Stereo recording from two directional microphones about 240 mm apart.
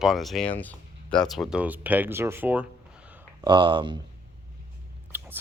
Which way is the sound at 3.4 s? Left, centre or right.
Centre.